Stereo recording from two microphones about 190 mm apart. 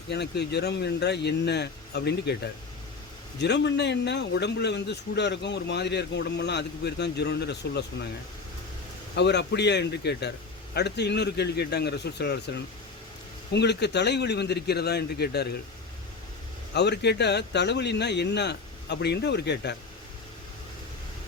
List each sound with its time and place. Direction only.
0.1 s a man's voice: 60° left (ahead or behind)
9.1 s a man's voice: 65° left (ahead or behind)
13.5 s a man's voice: 60° left (ahead or behind)
16.7 s a man's voice: 60° left (ahead or behind)